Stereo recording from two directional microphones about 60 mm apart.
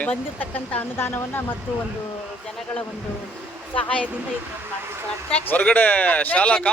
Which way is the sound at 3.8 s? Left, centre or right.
Left.